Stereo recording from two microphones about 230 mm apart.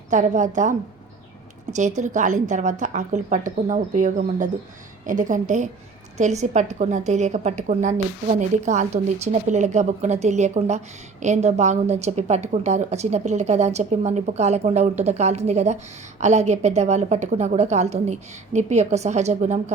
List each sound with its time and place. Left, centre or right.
0.1 s a woman's voice: right